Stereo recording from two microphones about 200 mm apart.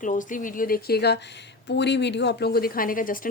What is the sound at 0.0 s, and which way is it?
A woman's voice, 40° left (ahead or behind).